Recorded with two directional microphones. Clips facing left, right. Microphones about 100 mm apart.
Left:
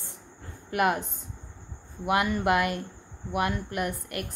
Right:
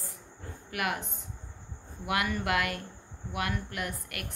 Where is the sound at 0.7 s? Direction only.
30° left (ahead or behind).